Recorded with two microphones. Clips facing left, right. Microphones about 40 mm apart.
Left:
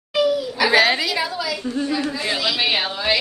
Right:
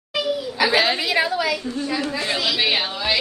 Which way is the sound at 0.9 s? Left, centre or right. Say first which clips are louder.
Right 2 dB; right.